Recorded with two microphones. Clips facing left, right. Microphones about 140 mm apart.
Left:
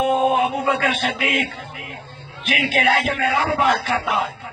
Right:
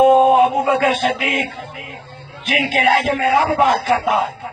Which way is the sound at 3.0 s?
30° right (ahead or behind).